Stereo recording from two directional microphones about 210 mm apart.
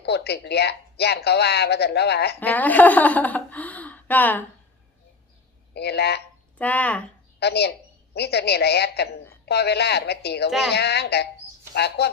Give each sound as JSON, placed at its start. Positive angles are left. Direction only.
{"t": 0.0, "sound": "speech", "side_deg": 50}
{"t": 2.4, "sound": "a woman's voice", "side_deg": 10}
{"t": 5.7, "sound": "speech", "side_deg": 50}
{"t": 6.6, "sound": "a woman's voice", "side_deg": 5}
{"t": 7.3, "sound": "speech", "side_deg": 50}